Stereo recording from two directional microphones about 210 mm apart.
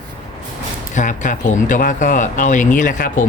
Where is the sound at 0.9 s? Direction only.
35° left (ahead or behind).